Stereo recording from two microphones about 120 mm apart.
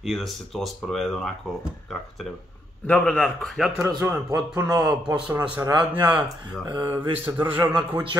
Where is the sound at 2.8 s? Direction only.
10° left (ahead or behind).